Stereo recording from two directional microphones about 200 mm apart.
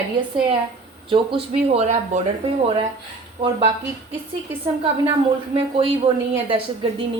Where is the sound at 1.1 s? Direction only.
25° right (ahead or behind).